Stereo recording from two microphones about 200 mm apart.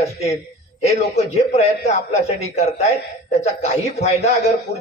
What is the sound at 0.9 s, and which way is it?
A man's voice, 30° left (ahead or behind).